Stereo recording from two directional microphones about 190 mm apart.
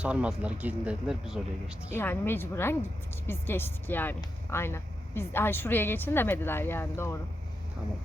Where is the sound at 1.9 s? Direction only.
10° left (ahead or behind).